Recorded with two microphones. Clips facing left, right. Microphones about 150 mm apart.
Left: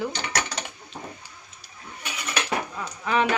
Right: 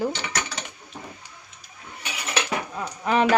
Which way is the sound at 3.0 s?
35° right (ahead or behind).